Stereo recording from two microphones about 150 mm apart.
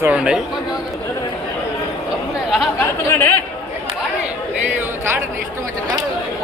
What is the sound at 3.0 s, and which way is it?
Speech, 15° left (ahead or behind).